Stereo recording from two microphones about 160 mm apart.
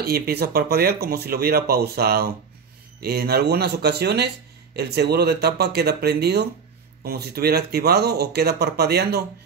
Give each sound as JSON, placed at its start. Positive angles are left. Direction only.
{"t": 0.0, "sound": "speech", "side_deg": -75}